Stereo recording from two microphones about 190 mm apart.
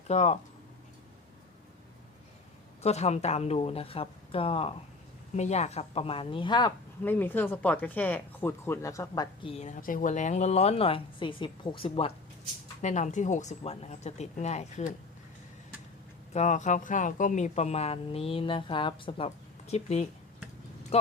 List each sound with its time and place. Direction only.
0.1 s speech: 35° left (ahead or behind)
2.8 s speech: 35° left (ahead or behind)
7.0 s speech: 10° left (ahead or behind); by 14.9 s 35° left (ahead or behind)
16.3 s speech: 40° left (ahead or behind)